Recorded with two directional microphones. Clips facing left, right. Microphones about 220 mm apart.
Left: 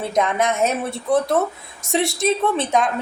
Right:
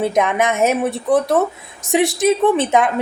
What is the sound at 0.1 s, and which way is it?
A woman's voice, 20° right (ahead or behind).